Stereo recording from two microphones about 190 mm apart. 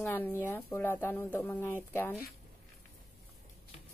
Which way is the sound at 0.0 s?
10° left (ahead or behind).